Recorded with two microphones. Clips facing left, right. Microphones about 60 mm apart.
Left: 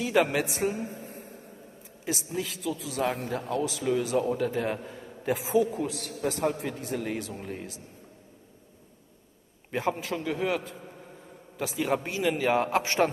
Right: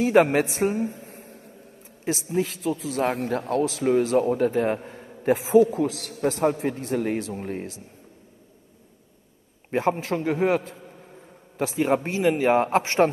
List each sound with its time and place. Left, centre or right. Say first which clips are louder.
0.0 s a man's voice: right 6 dB; right
1.0 s a sound: left 1 dB; right
2.3 s a man's voice: right 9 dB; right
3.2 s a man's voice: right 6 dB; right
9.7 s a man's voice: right 6 dB; right